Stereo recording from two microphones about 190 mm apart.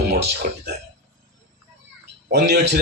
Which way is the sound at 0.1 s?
55° right (ahead or behind).